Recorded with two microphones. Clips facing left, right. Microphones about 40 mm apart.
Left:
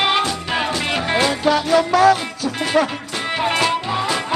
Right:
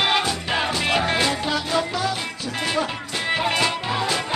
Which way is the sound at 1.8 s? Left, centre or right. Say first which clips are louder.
Left 11 dB; left.